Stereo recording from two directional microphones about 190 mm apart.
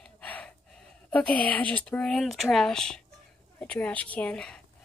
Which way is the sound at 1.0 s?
5° left (ahead or behind).